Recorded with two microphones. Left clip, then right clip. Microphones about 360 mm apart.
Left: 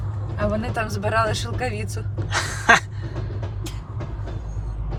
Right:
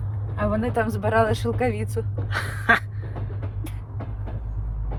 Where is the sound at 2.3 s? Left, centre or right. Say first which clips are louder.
Left 4 dB; centre.